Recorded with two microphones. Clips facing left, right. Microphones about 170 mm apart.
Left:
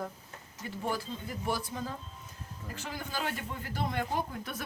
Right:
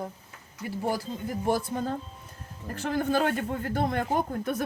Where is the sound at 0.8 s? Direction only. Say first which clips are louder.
Right 5 dB; 40° right (ahead or behind).